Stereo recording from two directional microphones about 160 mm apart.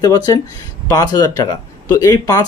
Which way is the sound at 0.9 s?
25° left (ahead or behind).